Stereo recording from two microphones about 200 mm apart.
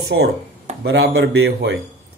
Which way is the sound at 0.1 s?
65° right (ahead or behind).